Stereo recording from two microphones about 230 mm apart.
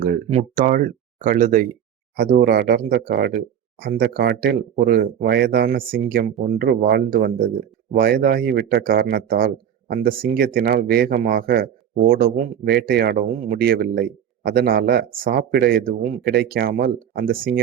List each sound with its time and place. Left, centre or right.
0.3 s speech: right